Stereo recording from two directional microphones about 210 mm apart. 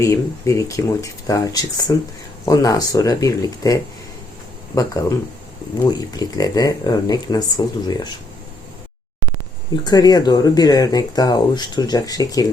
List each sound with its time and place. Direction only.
0.0 s speech: 15° left (ahead or behind)
9.8 s speech: 20° left (ahead or behind)